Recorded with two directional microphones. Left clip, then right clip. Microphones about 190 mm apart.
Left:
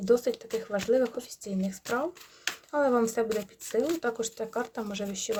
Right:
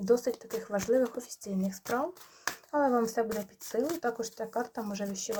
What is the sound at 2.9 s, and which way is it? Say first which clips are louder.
Speech: left 2 dB; 45° left (ahead or behind).